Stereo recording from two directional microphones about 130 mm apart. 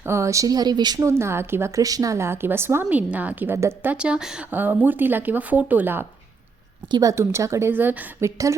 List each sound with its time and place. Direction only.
0.0 s speech: 20° right (ahead or behind)
3.9 s speech: 5° right (ahead or behind)
6.8 s speech: 30° right (ahead or behind); by 8.3 s 15° right (ahead or behind)